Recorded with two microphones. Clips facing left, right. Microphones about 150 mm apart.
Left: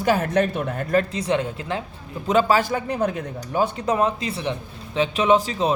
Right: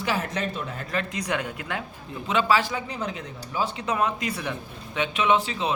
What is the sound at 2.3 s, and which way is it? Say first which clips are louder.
A man's voice: left 4 dB; 40° left (ahead or behind).